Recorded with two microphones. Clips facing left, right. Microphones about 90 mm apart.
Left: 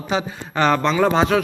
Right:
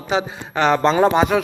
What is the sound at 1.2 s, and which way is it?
Speech, 5° right (ahead or behind).